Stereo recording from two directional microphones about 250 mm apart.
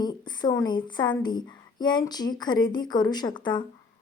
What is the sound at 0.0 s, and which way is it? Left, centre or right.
A woman's voice, centre.